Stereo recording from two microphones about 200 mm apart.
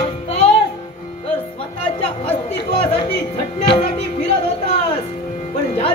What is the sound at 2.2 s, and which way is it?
Music, 30° left (ahead or behind).